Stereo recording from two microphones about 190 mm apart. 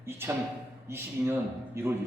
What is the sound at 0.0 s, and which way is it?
A man's voice, 15° right (ahead or behind).